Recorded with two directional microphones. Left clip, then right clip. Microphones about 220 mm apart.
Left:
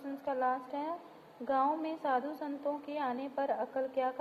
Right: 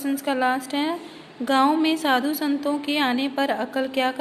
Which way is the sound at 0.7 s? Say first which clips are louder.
Right 12 dB; 10° right (ahead or behind).